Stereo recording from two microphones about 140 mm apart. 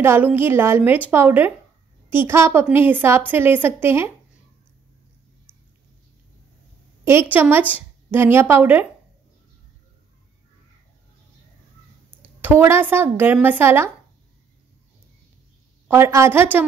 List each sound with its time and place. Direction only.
0.0 s a woman's voice: 15° right (ahead or behind)
7.1 s a woman's voice: 15° right (ahead or behind)
12.4 s a woman's voice: 15° right (ahead or behind)
15.9 s a woman's voice: 20° right (ahead or behind)